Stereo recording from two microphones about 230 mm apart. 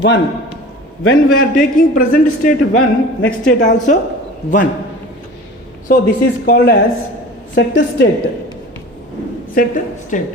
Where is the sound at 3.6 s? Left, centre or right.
Left.